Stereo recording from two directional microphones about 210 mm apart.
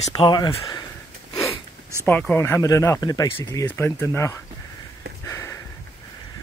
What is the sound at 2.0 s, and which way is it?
Speech, 10° left (ahead or behind).